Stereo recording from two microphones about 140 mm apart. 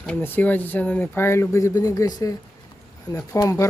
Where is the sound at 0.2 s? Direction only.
15° left (ahead or behind).